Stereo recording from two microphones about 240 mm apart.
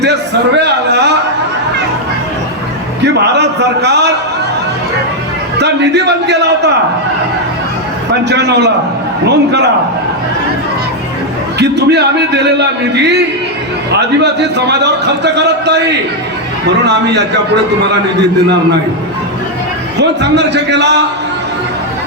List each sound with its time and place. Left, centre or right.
0.0 s a man's voice: right
3.0 s a man's voice: right
5.5 s a man's voice: right
8.1 s a man's voice: right
11.6 s a man's voice: right
20.0 s a man's voice: right